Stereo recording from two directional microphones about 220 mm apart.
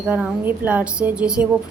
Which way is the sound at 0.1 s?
5° right (ahead or behind).